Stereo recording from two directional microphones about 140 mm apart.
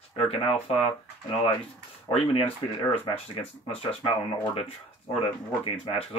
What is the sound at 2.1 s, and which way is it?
Speech, 40° left (ahead or behind).